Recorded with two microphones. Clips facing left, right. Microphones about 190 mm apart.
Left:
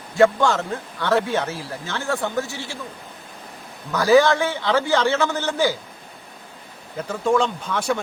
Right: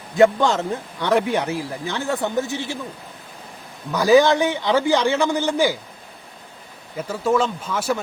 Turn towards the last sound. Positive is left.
turn(degrees=-5)  # may be behind; listen again after turning